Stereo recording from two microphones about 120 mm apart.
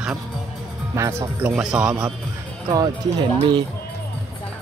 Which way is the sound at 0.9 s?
25° right (ahead or behind).